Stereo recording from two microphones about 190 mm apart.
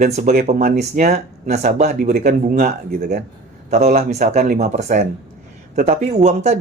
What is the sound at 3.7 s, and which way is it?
Speech, 35° right (ahead or behind).